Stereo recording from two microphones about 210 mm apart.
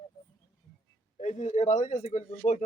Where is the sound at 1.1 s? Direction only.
35° left (ahead or behind).